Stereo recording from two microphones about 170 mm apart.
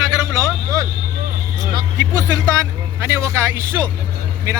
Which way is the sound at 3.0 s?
15° right (ahead or behind).